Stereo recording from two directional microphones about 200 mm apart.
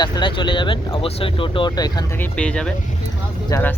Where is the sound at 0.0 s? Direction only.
20° left (ahead or behind).